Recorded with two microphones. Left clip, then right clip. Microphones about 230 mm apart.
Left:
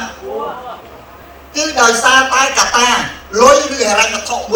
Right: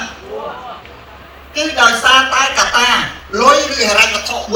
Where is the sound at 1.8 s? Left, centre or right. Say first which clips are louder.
Even; left.